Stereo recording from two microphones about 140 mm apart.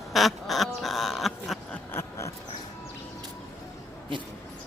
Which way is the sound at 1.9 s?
20° left (ahead or behind).